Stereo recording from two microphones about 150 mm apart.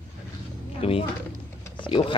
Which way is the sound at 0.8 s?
40° left (ahead or behind).